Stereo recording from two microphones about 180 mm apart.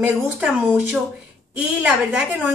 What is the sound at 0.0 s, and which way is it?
A woman's voice, 5° right (ahead or behind).